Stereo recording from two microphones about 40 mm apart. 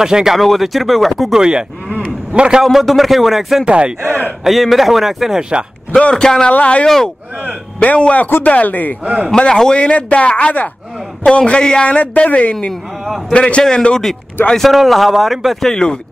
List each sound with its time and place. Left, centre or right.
0.0 s speech: centre
0.4 s speech: centre
1.3 s a man's voice: centre
2.6 s speech: centre
3.6 s speech: right
4.5 s speech: centre
5.9 s a man's voice: left
9.0 s speech: right
9.3 s a man's voice: centre
9.8 s speech: left
11.2 s a man's voice: left
11.9 s a man's voice: left; by 14.1 s centre
14.6 s speech: centre
15.6 s a man's voice: centre